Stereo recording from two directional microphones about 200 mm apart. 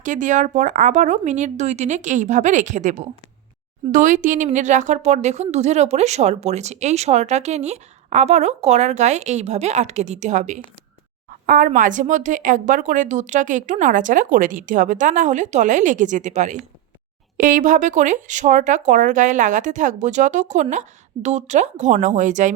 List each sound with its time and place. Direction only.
0.0 s a woman's voice: 40° right (ahead or behind)